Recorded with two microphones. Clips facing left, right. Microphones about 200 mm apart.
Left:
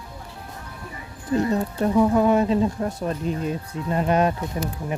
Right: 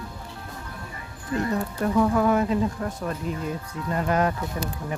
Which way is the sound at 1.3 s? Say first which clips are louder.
Left 4 dB; 25° left (ahead or behind).